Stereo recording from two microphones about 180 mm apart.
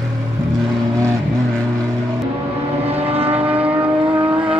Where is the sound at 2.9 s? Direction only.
35° right (ahead or behind).